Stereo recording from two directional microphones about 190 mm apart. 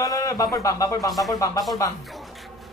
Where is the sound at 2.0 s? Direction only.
Centre (ahead or behind).